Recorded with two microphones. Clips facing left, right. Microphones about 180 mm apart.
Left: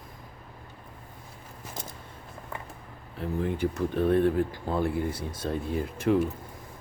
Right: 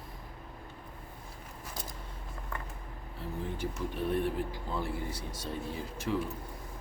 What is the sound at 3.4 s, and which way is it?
Speech, 60° left (ahead or behind).